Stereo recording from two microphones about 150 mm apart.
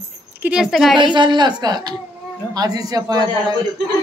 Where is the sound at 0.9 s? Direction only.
30° right (ahead or behind).